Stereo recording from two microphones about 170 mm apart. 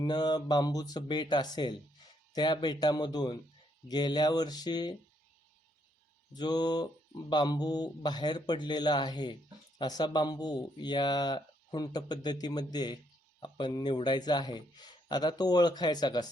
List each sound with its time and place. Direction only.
0.0 s speech: 25° left (ahead or behind)
6.3 s speech: 25° left (ahead or behind)